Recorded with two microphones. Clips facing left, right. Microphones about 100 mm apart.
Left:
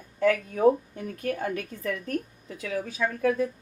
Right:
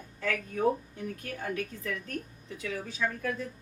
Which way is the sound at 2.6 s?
50° left (ahead or behind).